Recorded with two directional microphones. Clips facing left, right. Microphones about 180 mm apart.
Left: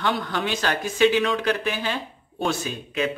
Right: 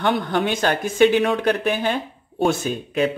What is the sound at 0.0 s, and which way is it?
Speech, 55° right (ahead or behind).